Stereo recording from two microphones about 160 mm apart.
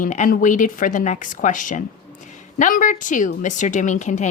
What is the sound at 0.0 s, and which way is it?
A woman's voice, 55° left (ahead or behind).